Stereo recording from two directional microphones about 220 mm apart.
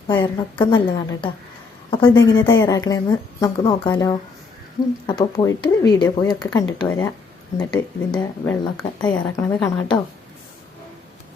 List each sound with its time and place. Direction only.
0.6 s a woman's voice: 20° left (ahead or behind)